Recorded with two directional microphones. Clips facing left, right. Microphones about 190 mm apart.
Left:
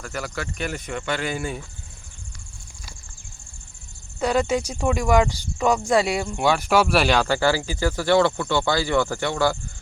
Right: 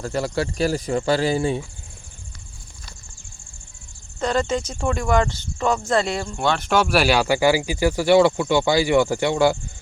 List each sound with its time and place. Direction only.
0.0 s speech: 30° right (ahead or behind)
4.2 s speech: 10° left (ahead or behind); by 9.6 s 15° right (ahead or behind)